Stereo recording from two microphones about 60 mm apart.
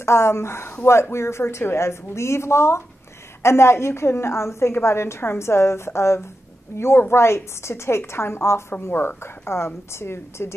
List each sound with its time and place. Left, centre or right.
0.0 s a woman's voice: left